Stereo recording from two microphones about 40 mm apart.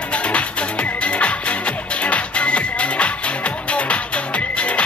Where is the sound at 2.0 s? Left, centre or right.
Left.